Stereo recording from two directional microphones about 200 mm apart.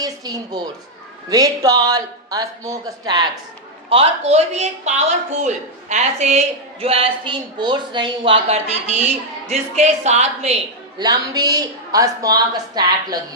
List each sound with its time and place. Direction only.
0.0 s a woman's voice: 20° right (ahead or behind)
11.0 s a woman's voice: 20° right (ahead or behind)